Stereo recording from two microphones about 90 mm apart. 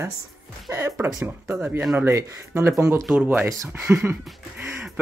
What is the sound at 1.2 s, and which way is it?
Speech, 25° right (ahead or behind).